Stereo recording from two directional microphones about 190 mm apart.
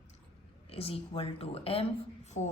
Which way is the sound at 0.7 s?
30° left (ahead or behind).